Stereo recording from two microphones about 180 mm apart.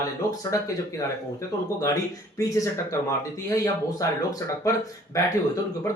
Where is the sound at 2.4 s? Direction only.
15° left (ahead or behind).